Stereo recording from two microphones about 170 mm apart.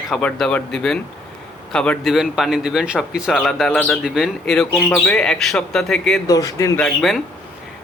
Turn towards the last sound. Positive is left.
turn(degrees=0)  # may be behind; listen again after turning